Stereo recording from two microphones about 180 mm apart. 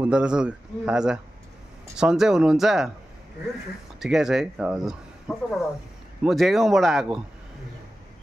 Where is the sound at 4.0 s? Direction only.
Centre (ahead or behind).